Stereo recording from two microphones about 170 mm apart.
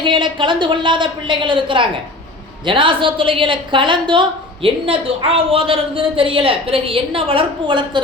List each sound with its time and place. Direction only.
0.0 s a woman's voice: 30° right (ahead or behind)